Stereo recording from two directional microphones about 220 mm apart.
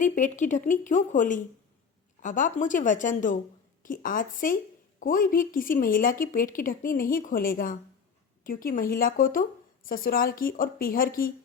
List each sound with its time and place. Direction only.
0.0 s a woman's voice: 35° left (ahead or behind)